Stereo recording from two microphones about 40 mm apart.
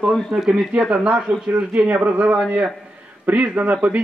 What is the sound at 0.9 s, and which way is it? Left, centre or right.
A man's voice, right.